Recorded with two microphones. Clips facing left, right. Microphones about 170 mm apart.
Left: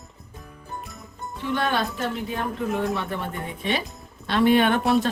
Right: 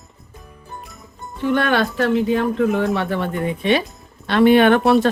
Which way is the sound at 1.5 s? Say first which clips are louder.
Right 6 dB; 70° right (ahead or behind).